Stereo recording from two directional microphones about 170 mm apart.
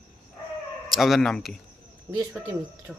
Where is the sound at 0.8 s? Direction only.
Centre (ahead or behind).